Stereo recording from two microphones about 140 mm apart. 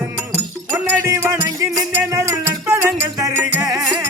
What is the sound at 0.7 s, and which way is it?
Music, 15° right (ahead or behind).